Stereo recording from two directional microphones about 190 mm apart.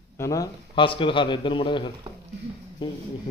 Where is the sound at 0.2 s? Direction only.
15° left (ahead or behind).